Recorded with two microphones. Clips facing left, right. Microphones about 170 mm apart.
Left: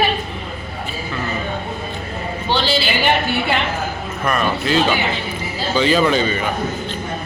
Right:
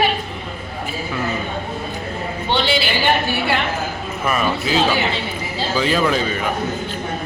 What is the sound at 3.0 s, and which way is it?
Speech, 20° left (ahead or behind).